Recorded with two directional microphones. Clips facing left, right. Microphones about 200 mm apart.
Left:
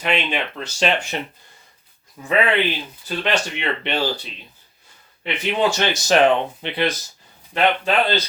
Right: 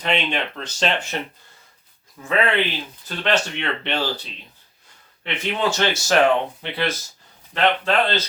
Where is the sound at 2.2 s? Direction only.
15° left (ahead or behind).